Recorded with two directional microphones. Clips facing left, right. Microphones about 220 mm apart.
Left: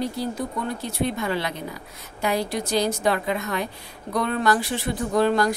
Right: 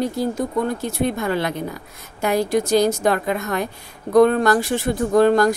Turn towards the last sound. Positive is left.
turn(degrees=-45)  # may be behind; listen again after turning